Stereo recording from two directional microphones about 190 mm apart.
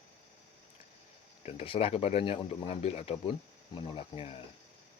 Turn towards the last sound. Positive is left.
turn(degrees=30)  # may be behind; listen again after turning